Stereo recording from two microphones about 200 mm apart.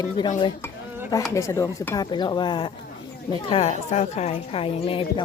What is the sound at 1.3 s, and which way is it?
A woman's voice, 15° left (ahead or behind).